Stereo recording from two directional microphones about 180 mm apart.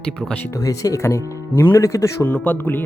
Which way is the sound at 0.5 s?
20° left (ahead or behind).